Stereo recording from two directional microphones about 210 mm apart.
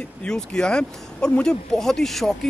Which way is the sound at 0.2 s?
5° left (ahead or behind).